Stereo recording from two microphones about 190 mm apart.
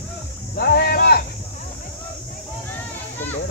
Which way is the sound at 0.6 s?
55° left (ahead or behind).